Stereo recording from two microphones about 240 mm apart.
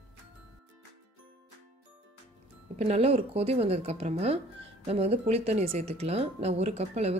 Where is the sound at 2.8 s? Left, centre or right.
Right.